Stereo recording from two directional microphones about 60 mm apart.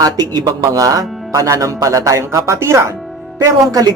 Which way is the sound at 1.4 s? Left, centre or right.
Right.